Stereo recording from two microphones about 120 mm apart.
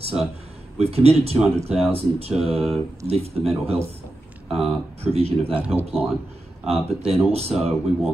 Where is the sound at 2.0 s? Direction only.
55° right (ahead or behind).